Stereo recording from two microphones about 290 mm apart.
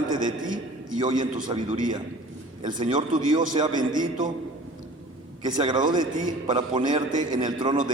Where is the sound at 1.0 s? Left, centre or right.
Centre.